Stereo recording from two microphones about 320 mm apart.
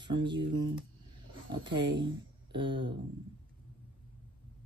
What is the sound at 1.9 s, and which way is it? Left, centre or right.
Speech, right.